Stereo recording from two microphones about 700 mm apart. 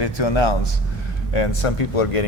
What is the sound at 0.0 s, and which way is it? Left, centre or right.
Speech, left.